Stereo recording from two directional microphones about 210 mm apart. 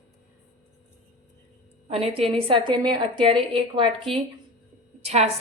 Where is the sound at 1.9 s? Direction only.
30° right (ahead or behind).